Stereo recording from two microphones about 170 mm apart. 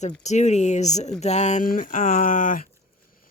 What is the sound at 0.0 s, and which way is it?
Speech, 45° left (ahead or behind).